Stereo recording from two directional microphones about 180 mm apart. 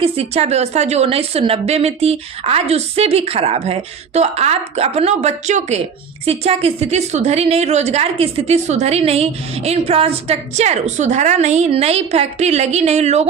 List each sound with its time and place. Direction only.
0.0 s a woman's voice: 35° right (ahead or behind)